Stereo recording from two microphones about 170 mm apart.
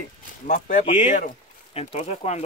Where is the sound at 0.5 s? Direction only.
50° left (ahead or behind).